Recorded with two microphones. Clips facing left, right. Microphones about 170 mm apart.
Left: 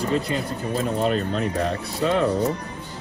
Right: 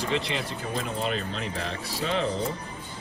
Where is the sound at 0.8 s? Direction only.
45° left (ahead or behind).